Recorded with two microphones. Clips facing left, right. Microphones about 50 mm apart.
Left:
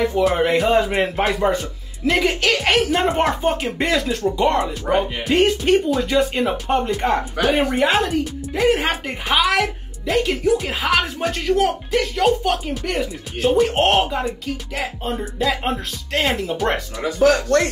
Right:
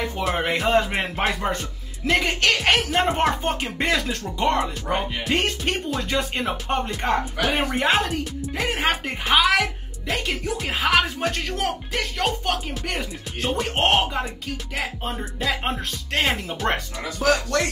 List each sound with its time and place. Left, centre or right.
0.1 s speech: centre
17.0 s speech: left